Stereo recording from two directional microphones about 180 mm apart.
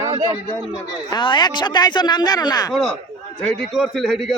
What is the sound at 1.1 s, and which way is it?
Speech, 25° left (ahead or behind).